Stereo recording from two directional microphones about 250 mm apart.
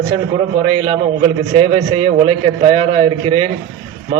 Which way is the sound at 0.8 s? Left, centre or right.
Right.